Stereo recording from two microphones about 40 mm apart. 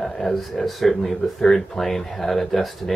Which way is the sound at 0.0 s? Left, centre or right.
Centre.